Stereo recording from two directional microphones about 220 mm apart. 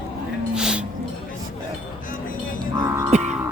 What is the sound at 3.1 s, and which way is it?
Music, 30° right (ahead or behind).